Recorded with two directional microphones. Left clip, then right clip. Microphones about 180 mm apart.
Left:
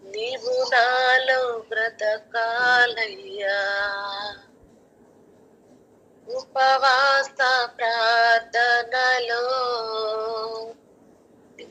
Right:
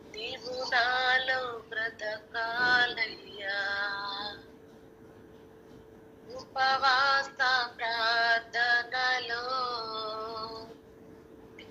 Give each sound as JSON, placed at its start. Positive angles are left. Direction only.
{"t": 0.1, "sound": "synthetic singing", "side_deg": 65}
{"t": 6.2, "sound": "synthetic singing", "side_deg": 65}